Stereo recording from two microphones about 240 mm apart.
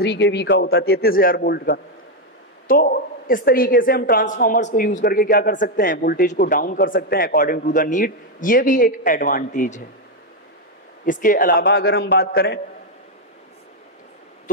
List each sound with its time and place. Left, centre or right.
0.0 s a man's voice: left
11.1 s a woman's voice: left